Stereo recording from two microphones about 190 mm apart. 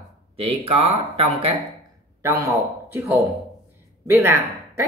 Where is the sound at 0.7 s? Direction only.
30° right (ahead or behind).